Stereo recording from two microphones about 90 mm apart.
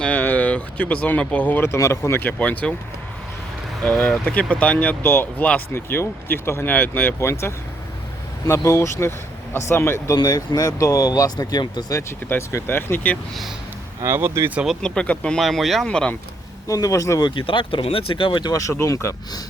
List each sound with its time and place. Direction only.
0.0 s speech: 20° left (ahead or behind)
2.4 s speech: 15° left (ahead or behind)
3.8 s speech: 20° left (ahead or behind)
10.2 s speech: 45° left (ahead or behind)
12.3 s speech: 30° left (ahead or behind)
14.0 s speech: 25° right (ahead or behind)
14.8 s speech: 10° left (ahead or behind)
15.4 s speech: centre (ahead or behind)
16.6 s speech: 40° left (ahead or behind)
17.2 s speech: 65° left (ahead or behind)
18.8 s speech: 35° left (ahead or behind)